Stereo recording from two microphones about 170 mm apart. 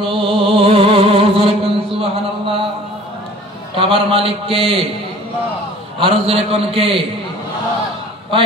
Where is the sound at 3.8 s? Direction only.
35° right (ahead or behind).